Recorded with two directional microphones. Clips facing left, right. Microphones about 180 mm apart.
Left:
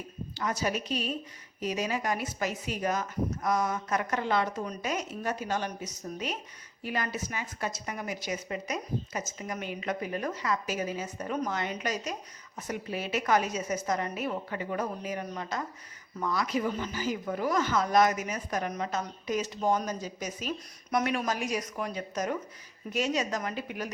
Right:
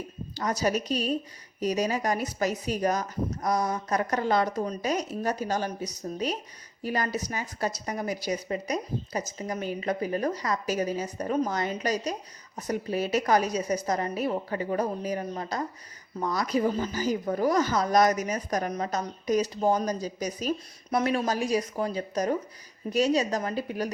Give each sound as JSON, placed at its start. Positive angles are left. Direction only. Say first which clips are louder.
{"t": 0.3, "sound": "speech", "louder": "right 4 dB", "side_deg": -40}